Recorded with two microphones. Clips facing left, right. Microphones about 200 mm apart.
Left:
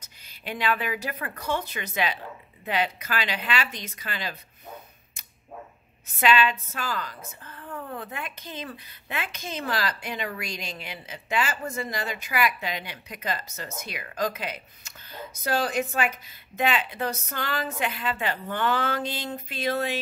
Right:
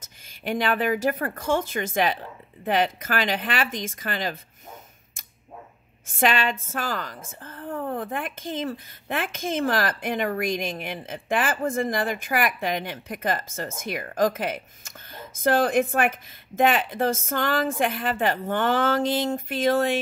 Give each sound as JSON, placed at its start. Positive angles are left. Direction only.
{"t": 0.0, "sound": "speech", "side_deg": -50}
{"t": 6.1, "sound": "speech", "side_deg": -50}